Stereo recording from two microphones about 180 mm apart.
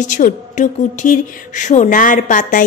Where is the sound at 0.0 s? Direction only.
45° left (ahead or behind).